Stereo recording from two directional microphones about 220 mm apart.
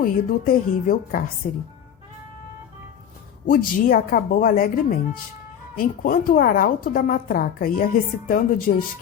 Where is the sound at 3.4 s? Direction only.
40° left (ahead or behind).